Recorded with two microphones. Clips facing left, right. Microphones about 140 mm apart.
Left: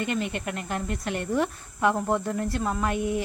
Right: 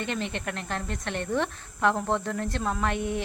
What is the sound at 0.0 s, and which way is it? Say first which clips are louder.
Speech: left 3 dB; 5° left (ahead or behind).